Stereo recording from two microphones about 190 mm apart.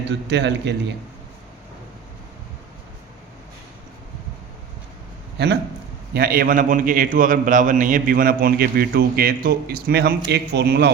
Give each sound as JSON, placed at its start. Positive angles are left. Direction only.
{"t": 0.1, "sound": "a man's voice", "side_deg": -65}
{"t": 5.4, "sound": "a man's voice", "side_deg": -60}
{"t": 6.1, "sound": "a man's voice", "side_deg": -50}